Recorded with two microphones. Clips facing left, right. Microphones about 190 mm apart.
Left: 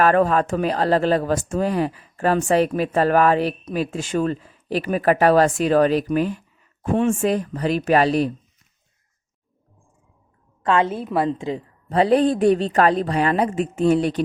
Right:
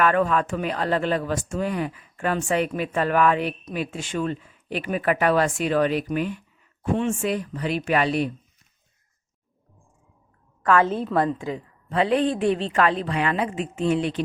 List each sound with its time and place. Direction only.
0.0 s speech: 40° left (ahead or behind)
10.6 s a woman's voice: 25° left (ahead or behind)
10.8 s a woman's voice: 10° left (ahead or behind)
11.3 s speech: 25° left (ahead or behind)
11.9 s speech: 40° left (ahead or behind)